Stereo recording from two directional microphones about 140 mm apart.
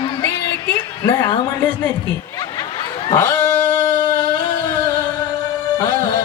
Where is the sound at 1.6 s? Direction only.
15° left (ahead or behind).